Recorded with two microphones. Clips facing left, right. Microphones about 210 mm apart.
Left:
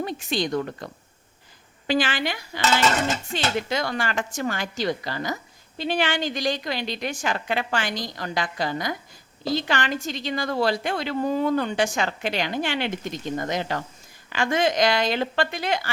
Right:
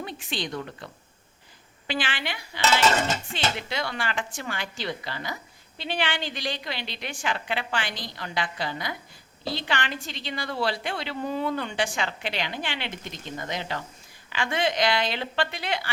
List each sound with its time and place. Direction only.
0.0 s speech: 40° left (ahead or behind)
1.9 s cutlery: 40° left (ahead or behind)
3.3 s speech: 45° left (ahead or behind)